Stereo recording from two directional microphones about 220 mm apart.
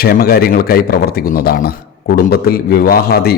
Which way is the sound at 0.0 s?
45° left (ahead or behind).